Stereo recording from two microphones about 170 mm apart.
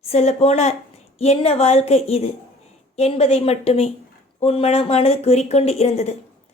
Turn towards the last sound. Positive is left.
turn(degrees=40)  # may be behind; listen again after turning